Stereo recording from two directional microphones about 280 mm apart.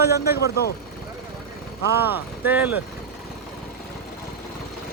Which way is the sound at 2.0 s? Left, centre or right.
Centre.